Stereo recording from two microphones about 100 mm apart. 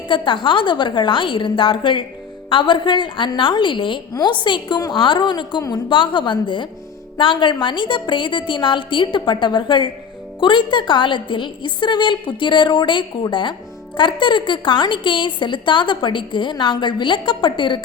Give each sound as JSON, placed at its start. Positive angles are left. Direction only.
{"t": 0.1, "sound": "a woman's voice", "side_deg": 55}